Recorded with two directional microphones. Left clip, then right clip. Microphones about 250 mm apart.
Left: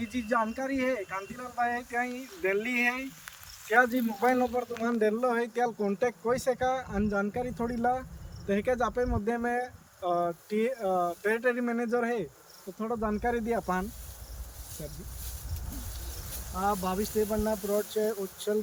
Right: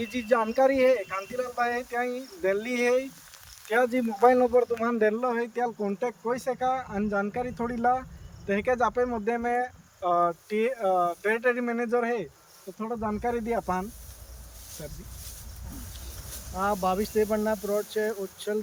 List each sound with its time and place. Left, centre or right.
0.0 s speech: right
4.2 s speech: right
4.8 s speech: centre
16.6 s speech: centre